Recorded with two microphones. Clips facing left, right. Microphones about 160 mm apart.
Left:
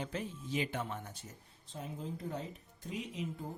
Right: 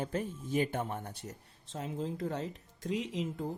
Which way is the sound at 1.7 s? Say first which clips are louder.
Right 6 dB; 75° right (ahead or behind).